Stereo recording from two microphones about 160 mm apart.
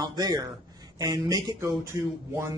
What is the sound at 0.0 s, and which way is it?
Speech, 25° right (ahead or behind).